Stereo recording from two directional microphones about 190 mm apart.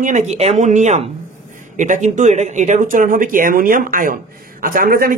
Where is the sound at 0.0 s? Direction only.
40° right (ahead or behind).